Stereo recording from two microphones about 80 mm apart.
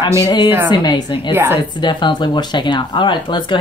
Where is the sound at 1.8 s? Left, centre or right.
Left.